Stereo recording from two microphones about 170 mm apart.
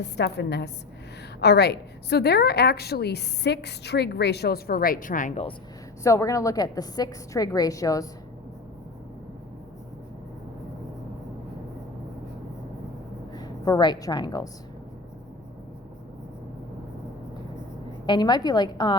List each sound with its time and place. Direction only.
0.0 s a woman's voice: 80° left; by 5.4 s 50° left (ahead or behind)
6.0 s a woman's voice: 15° left (ahead or behind)
13.3 s a woman's voice: 20° left (ahead or behind)
18.0 s a woman's voice: 25° left (ahead or behind)